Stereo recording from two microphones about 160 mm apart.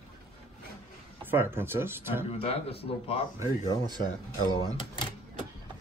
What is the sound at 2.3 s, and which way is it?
A man's voice, 35° left (ahead or behind).